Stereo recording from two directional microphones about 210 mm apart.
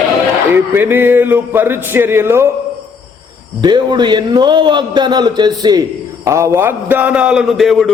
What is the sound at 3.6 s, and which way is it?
A man's voice, 20° right (ahead or behind).